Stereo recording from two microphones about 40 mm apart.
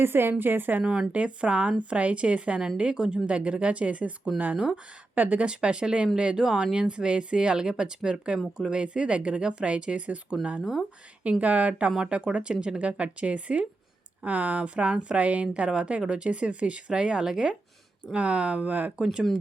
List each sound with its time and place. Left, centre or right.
0.0 s a woman's voice: right
0.8 s a woman's voice: right
5.1 s speech: right
5.5 s a woman's voice: right
14.3 s a woman's voice: right; by 17.6 s centre
18.1 s speech: right